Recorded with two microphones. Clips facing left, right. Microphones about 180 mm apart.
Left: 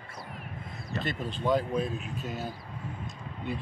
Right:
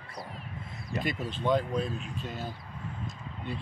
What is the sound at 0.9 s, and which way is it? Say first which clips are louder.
Speech: right 1 dB; 10° right (ahead or behind).